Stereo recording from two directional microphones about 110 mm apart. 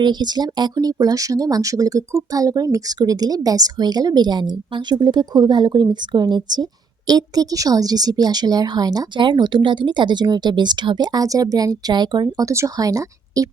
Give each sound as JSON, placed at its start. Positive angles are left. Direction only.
{"t": 0.0, "sound": "speech", "side_deg": -40}